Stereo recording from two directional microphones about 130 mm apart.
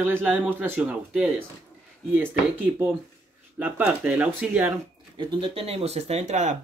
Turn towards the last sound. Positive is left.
turn(degrees=-65)  # may be behind; listen again after turning